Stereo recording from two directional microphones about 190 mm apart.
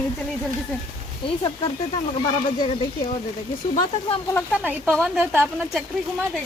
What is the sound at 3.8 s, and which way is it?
Speech, 30° left (ahead or behind).